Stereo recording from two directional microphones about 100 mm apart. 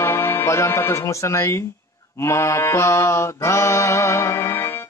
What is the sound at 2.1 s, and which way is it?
Mantra, 30° left (ahead or behind).